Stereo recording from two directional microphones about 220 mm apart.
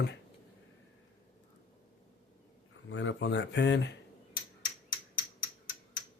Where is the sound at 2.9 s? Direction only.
60° left (ahead or behind).